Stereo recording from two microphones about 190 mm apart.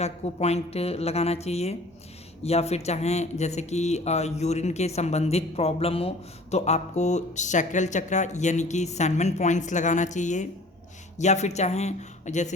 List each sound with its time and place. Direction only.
0.0 s speech: 35° left (ahead or behind)